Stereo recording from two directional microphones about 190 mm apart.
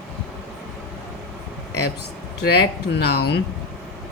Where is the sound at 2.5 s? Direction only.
55° left (ahead or behind).